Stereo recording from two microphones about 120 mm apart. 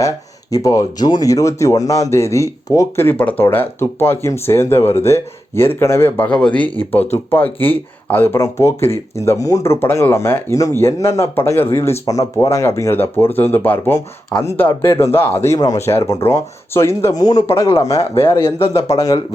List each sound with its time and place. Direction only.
0.5 s speech: 30° left (ahead or behind)
17.1 s speech: 35° left (ahead or behind)